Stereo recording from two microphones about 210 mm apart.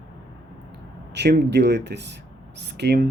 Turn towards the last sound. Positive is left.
turn(degrees=-55)  # may be behind; listen again after turning